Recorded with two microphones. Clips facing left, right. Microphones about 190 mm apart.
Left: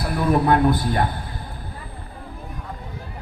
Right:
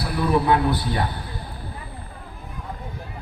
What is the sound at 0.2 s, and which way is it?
Speech, 50° left (ahead or behind).